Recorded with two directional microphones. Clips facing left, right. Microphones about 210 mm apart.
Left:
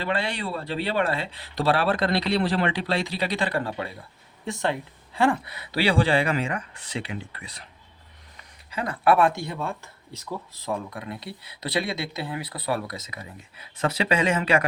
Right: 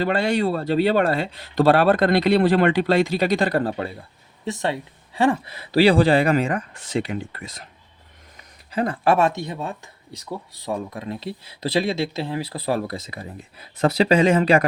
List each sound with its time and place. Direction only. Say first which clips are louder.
0.0 s speech: right 8 dB; 45° right (ahead or behind)
4.4 s speech: right 2 dB; 20° right (ahead or behind); by 7.7 s 45° right (ahead or behind)
8.7 s speech: right 2 dB; 30° right (ahead or behind)